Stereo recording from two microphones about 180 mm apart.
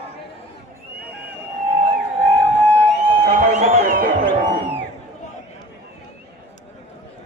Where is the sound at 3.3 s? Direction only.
40° right (ahead or behind).